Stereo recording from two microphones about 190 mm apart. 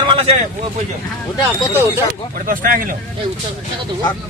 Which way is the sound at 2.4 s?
50° right (ahead or behind).